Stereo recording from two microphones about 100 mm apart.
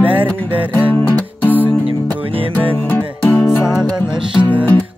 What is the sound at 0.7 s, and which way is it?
Music, 15° left (ahead or behind).